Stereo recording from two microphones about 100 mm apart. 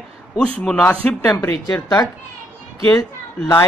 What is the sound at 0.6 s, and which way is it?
Speech, 5° left (ahead or behind).